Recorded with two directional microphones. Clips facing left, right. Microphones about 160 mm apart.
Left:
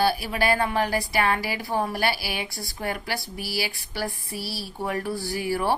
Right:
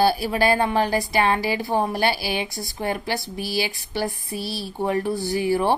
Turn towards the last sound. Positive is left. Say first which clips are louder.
# right 4 dB
turn(degrees=-20)  # may be behind; listen again after turning